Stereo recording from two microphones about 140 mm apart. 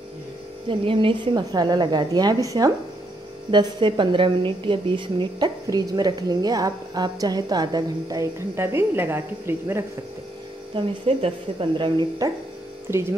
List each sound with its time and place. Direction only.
0.7 s a woman's voice: 40° right (ahead or behind); by 9.8 s 15° right (ahead or behind)
10.7 s speech: 45° right (ahead or behind)
11.8 s speech: 35° right (ahead or behind)